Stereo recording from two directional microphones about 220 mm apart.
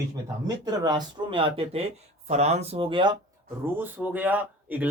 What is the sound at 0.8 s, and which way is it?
Speech, 20° right (ahead or behind).